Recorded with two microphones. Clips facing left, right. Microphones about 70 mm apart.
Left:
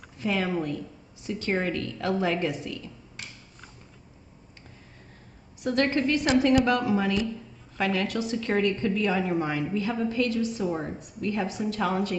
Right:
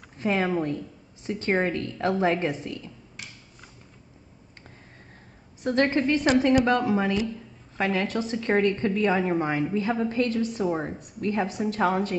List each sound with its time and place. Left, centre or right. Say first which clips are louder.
0.2 s a woman's voice: right 3 dB; right
5.6 s a woman's voice: right 2 dB; right